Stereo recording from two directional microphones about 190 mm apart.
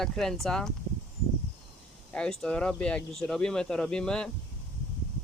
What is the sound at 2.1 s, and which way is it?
Speech, 5° left (ahead or behind).